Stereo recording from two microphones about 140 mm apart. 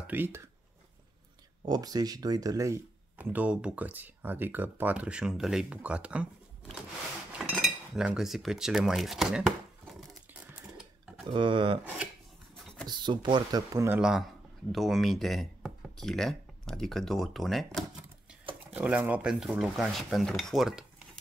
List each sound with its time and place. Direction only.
0.0 s speech: 15° right (ahead or behind)
1.7 s speech: 25° right (ahead or behind)
3.2 s speech: 10° right (ahead or behind)
7.3 s cutlery: 5° right (ahead or behind)
11.2 s speech: 35° right (ahead or behind)
11.8 s speech: 10° right (ahead or behind)
12.8 s speech: 35° right (ahead or behind)
14.7 s speech: centre (ahead or behind)
18.4 s a sound: 40° right (ahead or behind)
18.8 s speech: 10° right (ahead or behind)